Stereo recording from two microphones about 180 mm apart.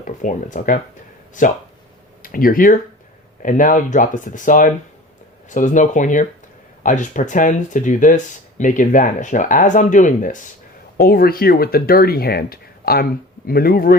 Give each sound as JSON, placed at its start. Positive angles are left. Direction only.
{"t": 0.0, "sound": "speech", "side_deg": 45}
{"t": 2.2, "sound": "speech", "side_deg": 50}